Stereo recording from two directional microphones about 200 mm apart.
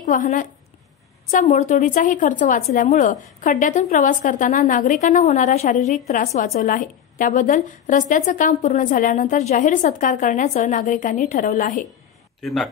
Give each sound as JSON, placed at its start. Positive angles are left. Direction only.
{"t": 0.0, "sound": "a woman's voice", "side_deg": 45}
{"t": 12.4, "sound": "a man's voice", "side_deg": 0}